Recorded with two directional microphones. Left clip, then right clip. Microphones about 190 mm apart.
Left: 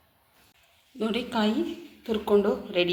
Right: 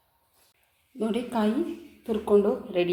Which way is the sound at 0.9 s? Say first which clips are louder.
Even; 15° right (ahead or behind).